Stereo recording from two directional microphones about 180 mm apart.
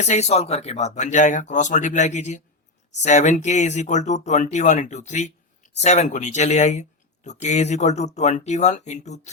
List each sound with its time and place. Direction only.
0.0 s speech: 40° left (ahead or behind)